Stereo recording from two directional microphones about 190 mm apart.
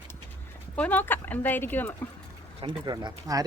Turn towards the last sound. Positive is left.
turn(degrees=-20)  # may be behind; listen again after turning